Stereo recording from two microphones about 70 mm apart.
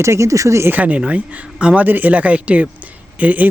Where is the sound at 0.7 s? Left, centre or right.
Right.